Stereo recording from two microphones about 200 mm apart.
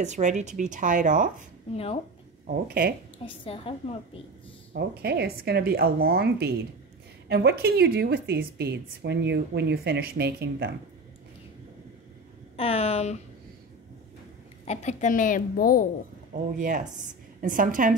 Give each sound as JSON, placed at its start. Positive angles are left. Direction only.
{"t": 0.0, "sound": "speech", "side_deg": -35}
{"t": 2.4, "sound": "a woman's voice", "side_deg": -45}
{"t": 3.3, "sound": "a woman's voice", "side_deg": 30}
{"t": 4.7, "sound": "a woman's voice", "side_deg": -55}
{"t": 12.5, "sound": "a woman's voice", "side_deg": 30}
{"t": 14.6, "sound": "a woman's voice", "side_deg": 35}
{"t": 16.5, "sound": "a woman's voice", "side_deg": -40}